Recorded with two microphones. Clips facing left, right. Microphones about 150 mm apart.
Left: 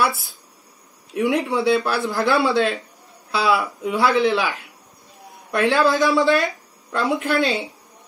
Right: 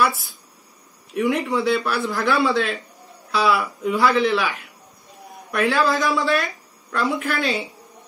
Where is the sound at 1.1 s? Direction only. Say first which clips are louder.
Left 1 dB; 25° left (ahead or behind).